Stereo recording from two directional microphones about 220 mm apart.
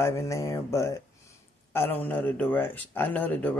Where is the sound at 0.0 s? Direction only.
15° left (ahead or behind).